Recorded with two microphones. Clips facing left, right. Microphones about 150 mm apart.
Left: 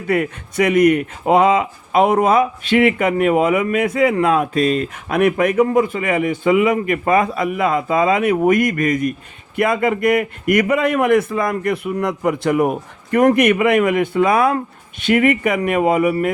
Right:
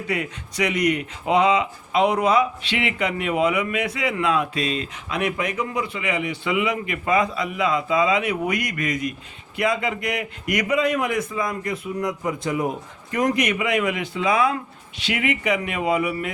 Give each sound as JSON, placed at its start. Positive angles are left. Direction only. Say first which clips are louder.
{"t": 0.1, "sound": "a man's voice", "louder": "left 10 dB", "side_deg": 50}